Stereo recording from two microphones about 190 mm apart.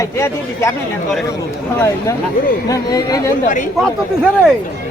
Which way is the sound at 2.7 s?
20° left (ahead or behind).